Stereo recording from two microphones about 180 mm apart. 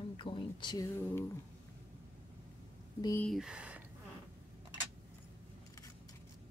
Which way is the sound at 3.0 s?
20° left (ahead or behind).